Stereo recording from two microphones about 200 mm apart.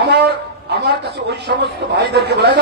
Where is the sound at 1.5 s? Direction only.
55° right (ahead or behind).